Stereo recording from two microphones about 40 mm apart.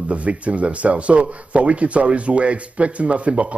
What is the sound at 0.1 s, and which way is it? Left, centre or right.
Speech, right.